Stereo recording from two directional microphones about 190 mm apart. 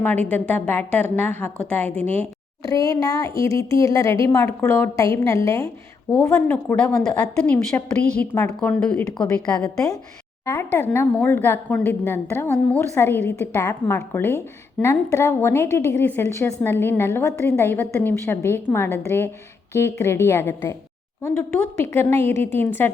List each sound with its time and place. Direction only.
0.0 s a woman's voice: 10° left (ahead or behind)
3.0 s speech: 20° left (ahead or behind)
3.3 s speech: 30° right (ahead or behind)
3.6 s a woman's voice: 15° left (ahead or behind)
9.6 s a woman's voice: 20° left (ahead or behind)
21.8 s a woman's voice: 15° left (ahead or behind)
22.3 s a woman's voice: 40° right (ahead or behind)